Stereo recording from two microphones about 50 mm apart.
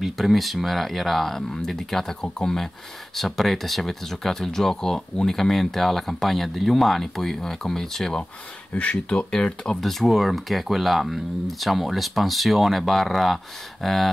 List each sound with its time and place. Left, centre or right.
0.0 s speech: centre
8.7 s speech: left
9.3 s speech: centre
9.8 s speech: centre